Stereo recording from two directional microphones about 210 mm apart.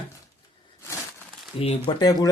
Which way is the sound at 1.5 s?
25° left (ahead or behind).